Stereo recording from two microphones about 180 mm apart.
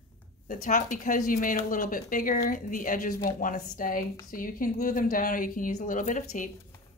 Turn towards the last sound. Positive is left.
turn(degrees=45)  # may be behind; listen again after turning